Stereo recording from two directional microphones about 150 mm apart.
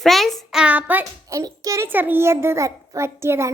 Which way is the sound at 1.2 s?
20° right (ahead or behind).